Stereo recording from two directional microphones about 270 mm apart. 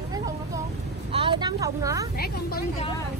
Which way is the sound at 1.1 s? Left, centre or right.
Centre.